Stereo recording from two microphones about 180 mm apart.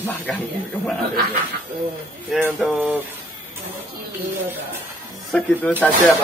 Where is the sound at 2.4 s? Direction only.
5° right (ahead or behind).